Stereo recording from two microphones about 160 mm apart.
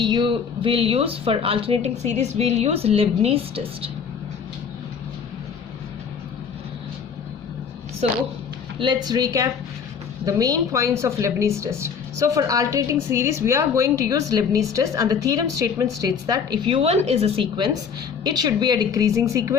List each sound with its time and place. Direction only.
0.0 s speech: 30° right (ahead or behind)
8.0 s speech: 40° right (ahead or behind)
8.8 s a woman's voice: 25° right (ahead or behind)